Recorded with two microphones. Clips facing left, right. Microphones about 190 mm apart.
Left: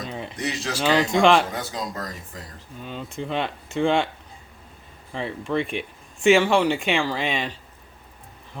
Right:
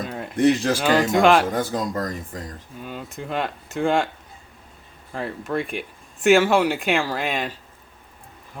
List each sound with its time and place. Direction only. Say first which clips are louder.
0.1 s speech: right 1 dB; 5° right (ahead or behind)
0.3 s speech: right 13 dB; 55° right (ahead or behind)
1.1 s speech: right 1 dB; 5° right (ahead or behind)
1.5 s speech: right 6 dB; 50° right (ahead or behind)
2.8 s speech: left 1 dB; 5° right (ahead or behind)
5.1 s speech: even; 5° right (ahead or behind)